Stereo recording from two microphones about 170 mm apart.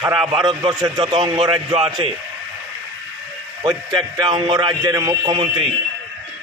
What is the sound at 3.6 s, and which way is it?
A man's voice, 25° right (ahead or behind).